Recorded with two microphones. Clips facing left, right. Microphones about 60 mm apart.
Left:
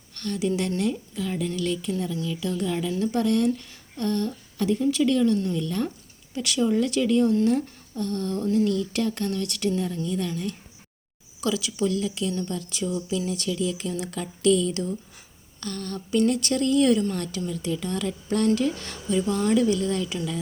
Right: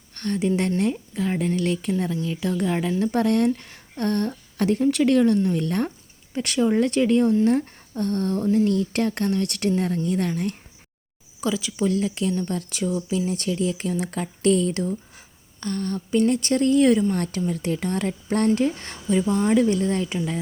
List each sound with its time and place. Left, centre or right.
0.1 s a woman's voice: right
11.3 s speech: right
15.6 s speech: right
17.5 s speech: right